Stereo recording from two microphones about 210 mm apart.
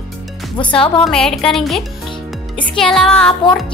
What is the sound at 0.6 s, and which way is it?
Speech, 25° left (ahead or behind).